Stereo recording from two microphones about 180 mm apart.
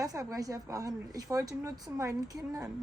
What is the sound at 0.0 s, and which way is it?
A woman's voice, 20° right (ahead or behind).